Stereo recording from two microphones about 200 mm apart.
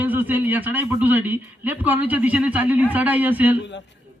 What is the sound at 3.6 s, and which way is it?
Speech, 60° left (ahead or behind).